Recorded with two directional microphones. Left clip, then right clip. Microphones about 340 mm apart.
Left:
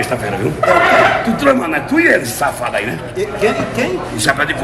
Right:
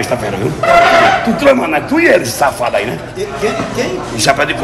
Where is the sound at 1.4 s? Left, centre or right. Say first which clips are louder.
Right 3 dB; centre.